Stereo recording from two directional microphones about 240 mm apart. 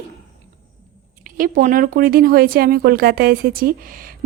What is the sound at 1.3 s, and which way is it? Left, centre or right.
Speech, right.